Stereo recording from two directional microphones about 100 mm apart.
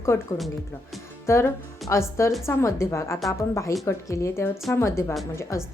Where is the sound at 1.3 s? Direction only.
30° left (ahead or behind).